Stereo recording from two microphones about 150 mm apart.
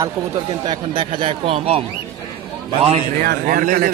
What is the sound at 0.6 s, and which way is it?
Speech, 30° right (ahead or behind).